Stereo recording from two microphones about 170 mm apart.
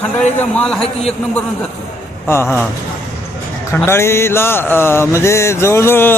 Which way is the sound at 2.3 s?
15° left (ahead or behind).